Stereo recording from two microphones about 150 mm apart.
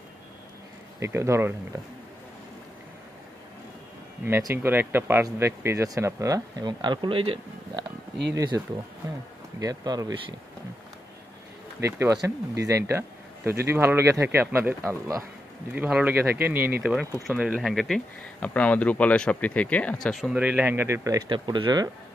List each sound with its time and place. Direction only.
0.9 s speech: 20° right (ahead or behind)
4.2 s speech: 20° right (ahead or behind); by 7.8 s 35° right (ahead or behind)
8.4 s speech: 25° right (ahead or behind)
11.8 s speech: 20° right (ahead or behind)
21.3 s speech: 30° right (ahead or behind)